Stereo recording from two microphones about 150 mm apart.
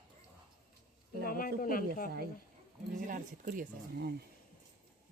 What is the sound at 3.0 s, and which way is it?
Speech, 65° right (ahead or behind).